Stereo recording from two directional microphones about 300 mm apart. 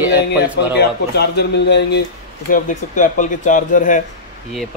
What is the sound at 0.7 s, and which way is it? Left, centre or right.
Speech, left.